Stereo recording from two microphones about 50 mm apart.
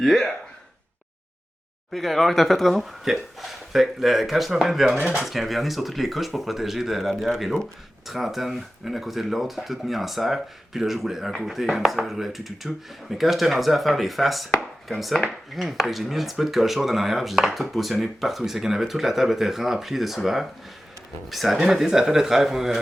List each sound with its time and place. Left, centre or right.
0.0 s speech: centre
1.9 s speech: centre
15.2 s dishes: centre
15.6 s speech: centre